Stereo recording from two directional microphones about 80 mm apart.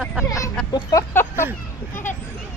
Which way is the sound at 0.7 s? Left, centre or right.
Left.